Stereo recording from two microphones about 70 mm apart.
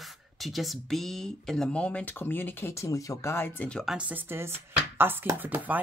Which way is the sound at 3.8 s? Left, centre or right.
Centre.